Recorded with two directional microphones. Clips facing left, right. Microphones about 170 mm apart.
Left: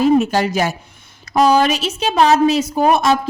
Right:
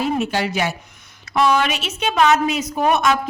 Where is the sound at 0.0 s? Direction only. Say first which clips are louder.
Left 7 dB; 40° left (ahead or behind).